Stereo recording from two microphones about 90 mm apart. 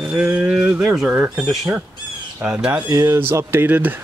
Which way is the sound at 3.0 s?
30° right (ahead or behind).